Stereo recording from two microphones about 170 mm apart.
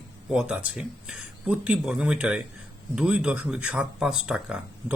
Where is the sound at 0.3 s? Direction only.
5° right (ahead or behind).